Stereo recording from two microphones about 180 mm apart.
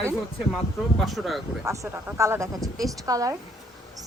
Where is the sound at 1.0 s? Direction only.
Centre (ahead or behind).